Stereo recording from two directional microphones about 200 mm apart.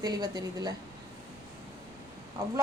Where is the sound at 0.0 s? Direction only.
20° right (ahead or behind).